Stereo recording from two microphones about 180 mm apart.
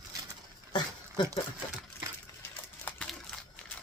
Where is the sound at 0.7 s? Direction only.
25° left (ahead or behind).